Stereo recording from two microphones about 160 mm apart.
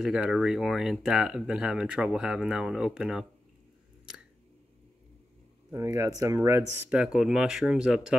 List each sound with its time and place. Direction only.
0.0 s speech: 5° right (ahead or behind)
5.7 s speech: 15° right (ahead or behind)
6.9 s speech: 5° right (ahead or behind)